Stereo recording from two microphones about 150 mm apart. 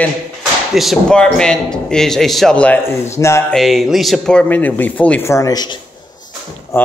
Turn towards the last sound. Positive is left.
turn(degrees=15)  # may be behind; listen again after turning